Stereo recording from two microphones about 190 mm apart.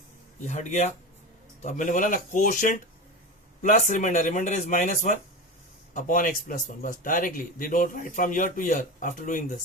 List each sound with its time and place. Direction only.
0.4 s a man's voice: 40° left (ahead or behind)